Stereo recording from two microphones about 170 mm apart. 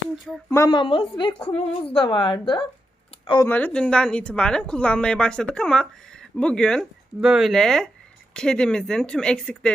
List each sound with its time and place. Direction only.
0.5 s speech: 15° left (ahead or behind)
0.8 s a woman's voice: 30° left (ahead or behind)
3.4 s a woman's voice: 10° left (ahead or behind)